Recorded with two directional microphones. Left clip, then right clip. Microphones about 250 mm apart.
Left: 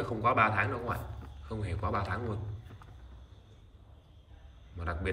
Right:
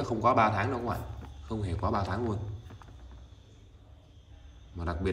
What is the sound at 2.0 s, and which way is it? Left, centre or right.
Speech, centre.